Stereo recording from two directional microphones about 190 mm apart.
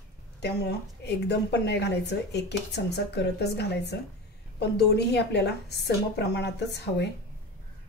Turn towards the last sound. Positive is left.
turn(degrees=65)  # may be behind; listen again after turning